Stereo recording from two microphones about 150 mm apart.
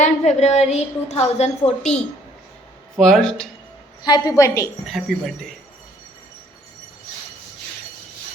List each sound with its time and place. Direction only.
0.0 s a woman's voice: 50° left (ahead or behind)
3.0 s speech: 5° left (ahead or behind)
4.0 s a woman's voice: 30° left (ahead or behind)
4.9 s speech: centre (ahead or behind)